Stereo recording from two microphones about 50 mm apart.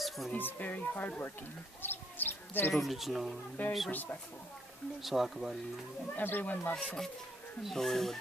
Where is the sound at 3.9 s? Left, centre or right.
Left.